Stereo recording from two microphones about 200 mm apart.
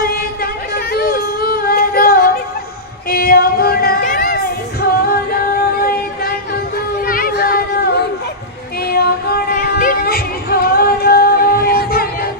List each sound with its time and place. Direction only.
0.9 s yodeling: 50° left (ahead or behind)
3.1 s female singing: 50° left (ahead or behind)
5.8 s music: 50° left (ahead or behind)
7.0 s a sound: 45° left (ahead or behind)
8.9 s music: 50° left (ahead or behind)